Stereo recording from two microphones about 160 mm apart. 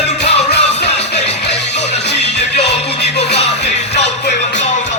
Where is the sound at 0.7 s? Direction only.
90° left.